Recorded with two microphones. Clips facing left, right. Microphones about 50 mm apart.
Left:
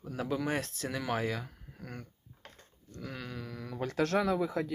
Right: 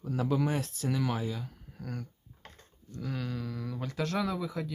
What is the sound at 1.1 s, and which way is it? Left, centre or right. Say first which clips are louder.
Speech: left 2 dB; left.